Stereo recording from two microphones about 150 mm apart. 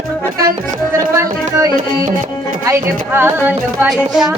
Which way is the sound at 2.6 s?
15° right (ahead or behind).